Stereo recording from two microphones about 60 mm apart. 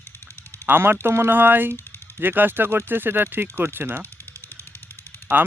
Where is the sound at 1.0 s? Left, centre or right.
Right.